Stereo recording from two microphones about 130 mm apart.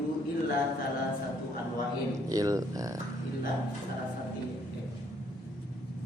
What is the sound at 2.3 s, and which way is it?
Speech, 25° right (ahead or behind).